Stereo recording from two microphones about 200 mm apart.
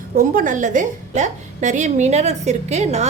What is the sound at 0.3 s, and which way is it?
A woman's voice, 40° right (ahead or behind).